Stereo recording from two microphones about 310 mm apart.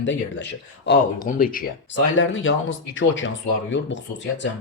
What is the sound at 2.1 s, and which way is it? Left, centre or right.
Speech, left.